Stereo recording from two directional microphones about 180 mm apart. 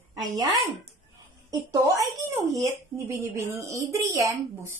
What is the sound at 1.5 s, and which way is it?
Speech, 20° right (ahead or behind).